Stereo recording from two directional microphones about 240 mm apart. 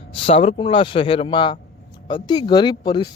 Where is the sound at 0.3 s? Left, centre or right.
Left.